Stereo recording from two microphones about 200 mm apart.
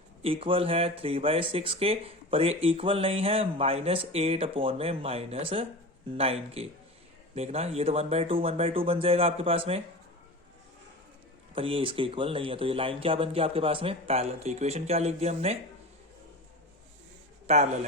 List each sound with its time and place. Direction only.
0.2 s speech: 30° right (ahead or behind)
11.5 s speech: 25° right (ahead or behind)
17.4 s a man's voice: 35° right (ahead or behind)